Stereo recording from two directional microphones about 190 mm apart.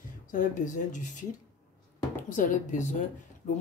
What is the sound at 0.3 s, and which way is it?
Speech, 45° left (ahead or behind).